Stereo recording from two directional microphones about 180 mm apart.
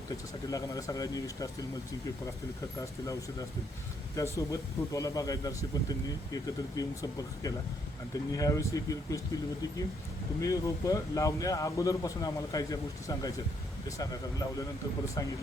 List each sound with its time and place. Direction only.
0.5 s speech: 20° left (ahead or behind)
2.7 s speech: 20° left (ahead or behind)
10.4 s speech: 20° left (ahead or behind)